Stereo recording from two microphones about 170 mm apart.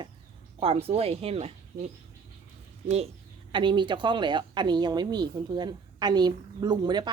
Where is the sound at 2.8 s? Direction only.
40° right (ahead or behind).